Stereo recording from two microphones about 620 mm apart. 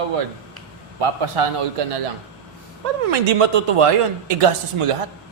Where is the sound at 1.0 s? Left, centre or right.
Right.